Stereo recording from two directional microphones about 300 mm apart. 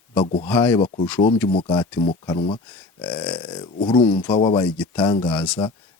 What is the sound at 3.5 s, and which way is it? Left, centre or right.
Speech, centre.